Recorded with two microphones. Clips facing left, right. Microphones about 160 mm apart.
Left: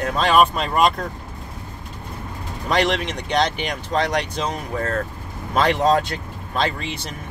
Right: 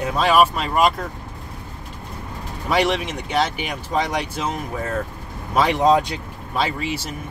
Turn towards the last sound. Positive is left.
turn(degrees=-10)  # may be behind; listen again after turning